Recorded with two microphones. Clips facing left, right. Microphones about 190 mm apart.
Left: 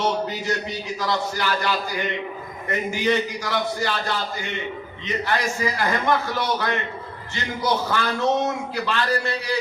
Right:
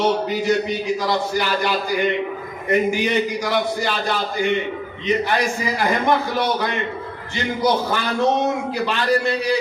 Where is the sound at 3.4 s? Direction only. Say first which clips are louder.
Right 4 dB; 15° right (ahead or behind).